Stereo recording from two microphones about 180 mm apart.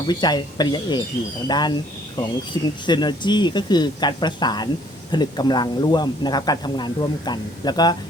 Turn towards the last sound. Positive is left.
turn(degrees=20)  # may be behind; listen again after turning